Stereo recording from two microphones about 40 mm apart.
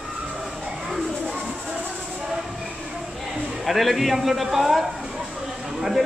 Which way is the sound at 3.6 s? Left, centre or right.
Centre.